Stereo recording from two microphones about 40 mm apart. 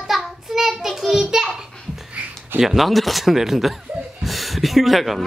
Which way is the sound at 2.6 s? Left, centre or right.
Centre.